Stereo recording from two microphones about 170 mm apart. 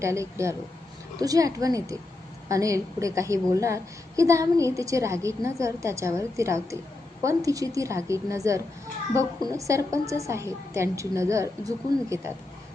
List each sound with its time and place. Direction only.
0.0 s a woman's voice: 15° right (ahead or behind)